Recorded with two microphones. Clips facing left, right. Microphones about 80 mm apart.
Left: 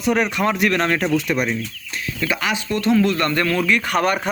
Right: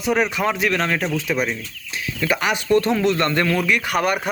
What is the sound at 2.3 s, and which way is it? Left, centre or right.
Speech, right.